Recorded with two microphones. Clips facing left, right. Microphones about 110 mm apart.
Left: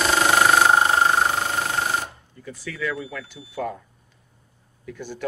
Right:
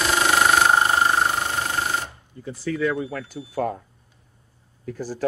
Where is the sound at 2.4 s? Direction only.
30° right (ahead or behind).